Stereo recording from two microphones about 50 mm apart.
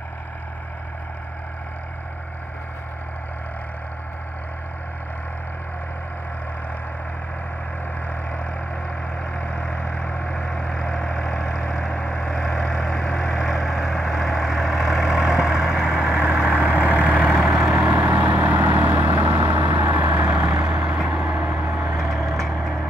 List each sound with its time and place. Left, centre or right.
8.1 s vehicle: left; by 17.3 s right
17.5 s vehicle: centre
17.9 s vehicle: right
18.8 s vehicle: right
20.2 s vehicle: centre
21.9 s vehicle: centre